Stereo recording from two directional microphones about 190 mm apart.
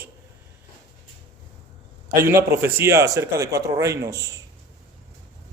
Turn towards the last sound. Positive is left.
turn(degrees=-15)  # may be behind; listen again after turning